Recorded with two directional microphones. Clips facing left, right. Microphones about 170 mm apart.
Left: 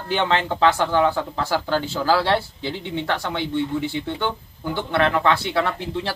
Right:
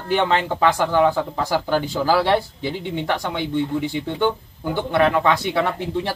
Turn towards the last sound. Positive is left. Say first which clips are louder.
# right 2 dB
turn(degrees=-15)  # may be behind; listen again after turning